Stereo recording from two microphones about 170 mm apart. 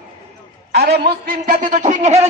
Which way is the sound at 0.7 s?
75° right (ahead or behind).